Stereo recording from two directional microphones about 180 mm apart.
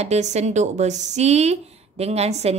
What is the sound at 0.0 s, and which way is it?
Speech, 40° right (ahead or behind).